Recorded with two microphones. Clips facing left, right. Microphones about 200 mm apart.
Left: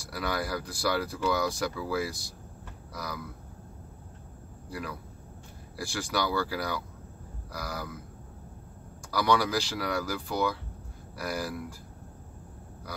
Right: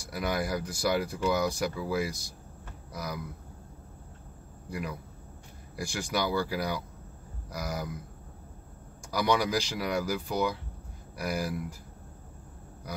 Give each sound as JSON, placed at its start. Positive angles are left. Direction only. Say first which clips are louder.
{"t": 0.1, "sound": "speech", "louder": "right 1 dB", "side_deg": -15}
{"t": 4.6, "sound": "a man's voice", "louder": "right 2 dB", "side_deg": -15}
{"t": 9.1, "sound": "speech", "louder": "left 1 dB", "side_deg": -15}